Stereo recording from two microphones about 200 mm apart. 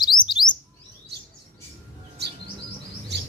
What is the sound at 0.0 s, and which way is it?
Bird, 20° left (ahead or behind).